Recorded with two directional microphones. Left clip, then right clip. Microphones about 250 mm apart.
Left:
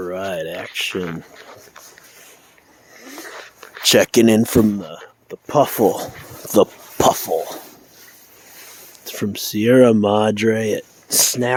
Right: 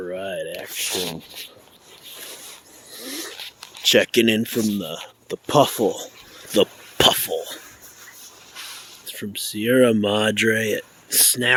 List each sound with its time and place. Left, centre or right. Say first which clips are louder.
0.0 s speech: left 4 dB; left
3.0 s a sound: right 4 dB; centre
3.8 s speech: left 3 dB; left
4.8 s speech: right 2 dB; centre
5.7 s speech: left 5 dB; left
6.5 s a sound: left 4 dB; left
9.0 s speech: left 5 dB; left